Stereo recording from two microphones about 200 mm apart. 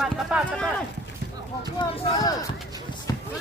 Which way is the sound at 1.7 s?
25° left (ahead or behind).